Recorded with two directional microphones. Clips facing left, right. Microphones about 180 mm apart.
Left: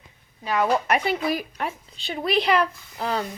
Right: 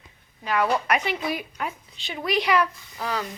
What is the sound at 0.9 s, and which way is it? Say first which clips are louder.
A woman's voice: left 2 dB; 30° left (ahead or behind).